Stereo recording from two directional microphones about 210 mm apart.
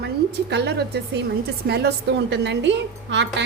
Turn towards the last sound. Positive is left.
turn(degrees=-55)  # may be behind; listen again after turning